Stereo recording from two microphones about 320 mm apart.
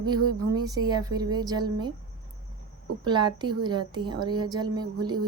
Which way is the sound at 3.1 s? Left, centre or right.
Centre.